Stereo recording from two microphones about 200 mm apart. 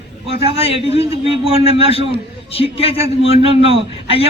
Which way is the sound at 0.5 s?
30° left (ahead or behind).